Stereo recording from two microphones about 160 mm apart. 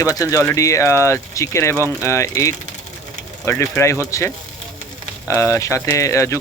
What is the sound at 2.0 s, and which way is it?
Speech, 20° left (ahead or behind).